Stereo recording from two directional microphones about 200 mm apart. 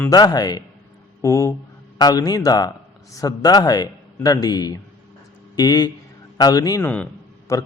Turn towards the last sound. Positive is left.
turn(degrees=15)  # may be behind; listen again after turning